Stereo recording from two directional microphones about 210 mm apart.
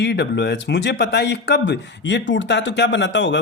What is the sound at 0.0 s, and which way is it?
A man's voice, 55° left (ahead or behind).